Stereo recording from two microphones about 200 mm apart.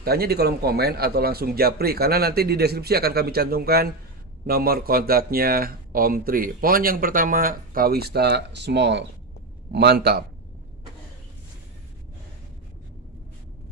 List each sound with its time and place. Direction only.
0.0 s speech: 50° right (ahead or behind)